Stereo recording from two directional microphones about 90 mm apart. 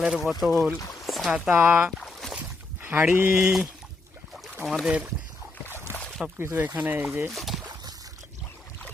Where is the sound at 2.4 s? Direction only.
25° right (ahead or behind).